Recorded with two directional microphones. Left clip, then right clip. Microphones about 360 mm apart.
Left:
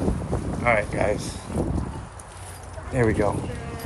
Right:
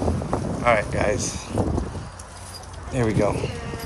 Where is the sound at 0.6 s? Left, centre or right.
Centre.